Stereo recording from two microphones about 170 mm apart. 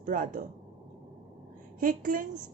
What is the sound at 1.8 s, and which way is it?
Speech, 50° right (ahead or behind).